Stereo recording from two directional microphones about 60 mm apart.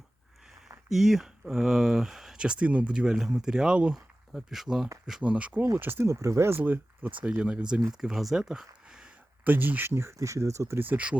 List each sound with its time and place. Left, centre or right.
0.9 s speech: centre
4.3 s speech: centre
5.2 s speech: right
5.7 s speech: right
6.1 s speech: right
6.6 s speech: right
7.3 s speech: centre
8.0 s speech: centre
9.4 s speech: right
10.2 s speech: right
10.8 s speech: right